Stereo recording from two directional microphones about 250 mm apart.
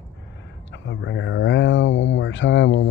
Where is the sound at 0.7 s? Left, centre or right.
Left.